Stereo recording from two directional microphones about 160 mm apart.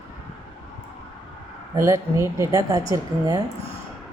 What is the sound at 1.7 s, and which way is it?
A woman's voice, 20° right (ahead or behind).